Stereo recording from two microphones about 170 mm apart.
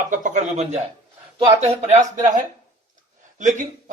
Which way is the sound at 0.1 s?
50° right (ahead or behind).